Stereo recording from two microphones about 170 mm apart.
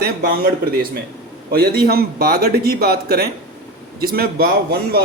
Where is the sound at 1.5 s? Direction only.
60° right (ahead or behind).